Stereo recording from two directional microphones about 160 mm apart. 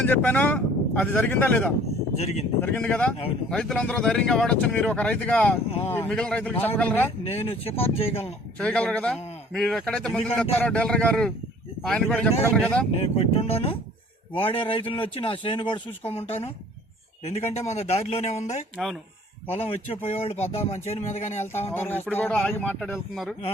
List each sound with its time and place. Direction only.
0.0 s speech: 10° left (ahead or behind)
2.1 s speech: 40° left (ahead or behind)
2.6 s speech: 10° left (ahead or behind)
7.3 s speech: 40° left (ahead or behind)
8.5 s a man's voice: 5° left (ahead or behind)
13.0 s speech: 40° left (ahead or behind)
21.4 s a man's voice: 15° left (ahead or behind)